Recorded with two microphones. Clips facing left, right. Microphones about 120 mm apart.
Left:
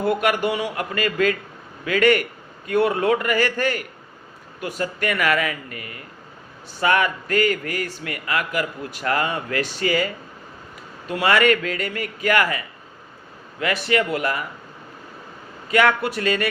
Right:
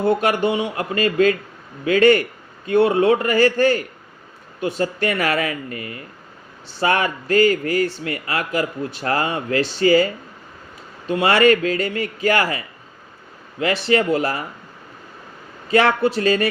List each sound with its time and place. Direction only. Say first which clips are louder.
0.0 s speech: right 3 dB; 30° right (ahead or behind)
11.1 s speech: right 3 dB; 30° right (ahead or behind)
15.7 s speech: right 3 dB; 30° right (ahead or behind)